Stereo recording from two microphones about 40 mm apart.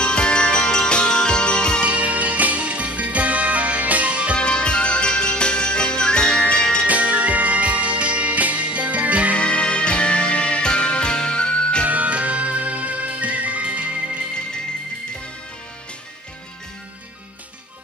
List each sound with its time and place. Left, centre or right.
0.0 s music: left
1.9 s music: right
4.4 s music: left
6.9 s music: right
9.4 s music: left
11.9 s music: right